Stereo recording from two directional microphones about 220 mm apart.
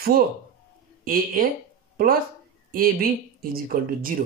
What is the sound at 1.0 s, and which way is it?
A woman's voice, 40° right (ahead or behind).